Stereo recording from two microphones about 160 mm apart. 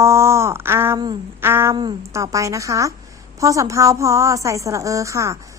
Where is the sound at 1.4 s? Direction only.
15° right (ahead or behind).